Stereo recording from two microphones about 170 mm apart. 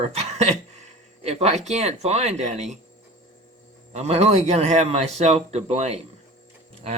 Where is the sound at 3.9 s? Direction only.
40° right (ahead or behind).